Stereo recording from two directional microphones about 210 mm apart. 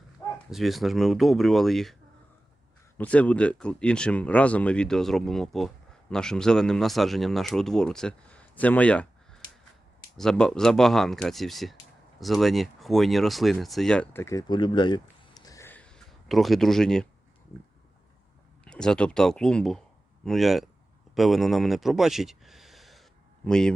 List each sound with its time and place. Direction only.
0.2 s bow-wow: 15° left (ahead or behind)
0.5 s speech: centre (ahead or behind)
3.0 s speech: 5° left (ahead or behind); by 15.0 s 20° left (ahead or behind)
15.4 s a sound: 15° left (ahead or behind)
18.6 s speech: 5° left (ahead or behind)